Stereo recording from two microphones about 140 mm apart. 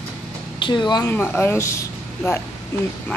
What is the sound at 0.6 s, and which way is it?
Speech, 35° left (ahead or behind).